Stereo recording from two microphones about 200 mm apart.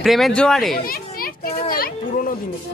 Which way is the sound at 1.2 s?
45° left (ahead or behind).